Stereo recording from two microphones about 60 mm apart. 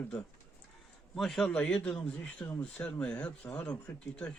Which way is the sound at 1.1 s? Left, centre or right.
Centre.